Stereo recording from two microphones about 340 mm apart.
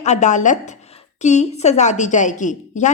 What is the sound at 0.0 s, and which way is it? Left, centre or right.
A woman's voice, left.